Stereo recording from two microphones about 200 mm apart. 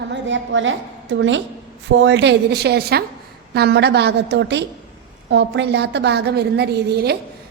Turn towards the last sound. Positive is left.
turn(degrees=-55)  # may be behind; listen again after turning